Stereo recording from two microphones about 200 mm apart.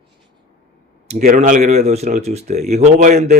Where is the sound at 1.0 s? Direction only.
35° right (ahead or behind).